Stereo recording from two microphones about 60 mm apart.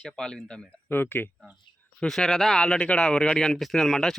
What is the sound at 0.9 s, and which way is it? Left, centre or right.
Speech, left.